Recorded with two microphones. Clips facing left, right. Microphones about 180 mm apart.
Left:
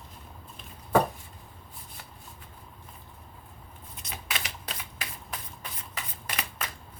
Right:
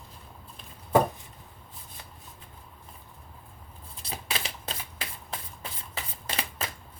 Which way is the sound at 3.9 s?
30° right (ahead or behind).